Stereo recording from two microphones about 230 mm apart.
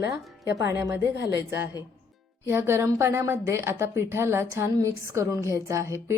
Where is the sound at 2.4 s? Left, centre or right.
Centre.